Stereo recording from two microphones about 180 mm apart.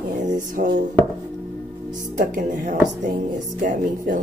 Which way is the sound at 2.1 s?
50° right (ahead or behind).